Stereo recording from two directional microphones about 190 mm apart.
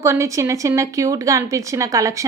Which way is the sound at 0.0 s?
15° right (ahead or behind).